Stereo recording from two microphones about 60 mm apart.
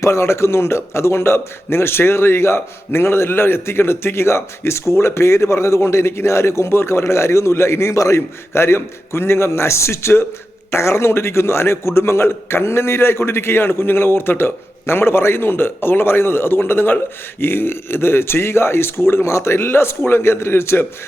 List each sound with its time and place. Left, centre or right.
0.0 s a man's voice: left